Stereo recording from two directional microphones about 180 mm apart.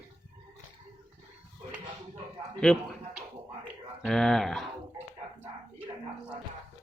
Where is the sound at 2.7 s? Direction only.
10° left (ahead or behind).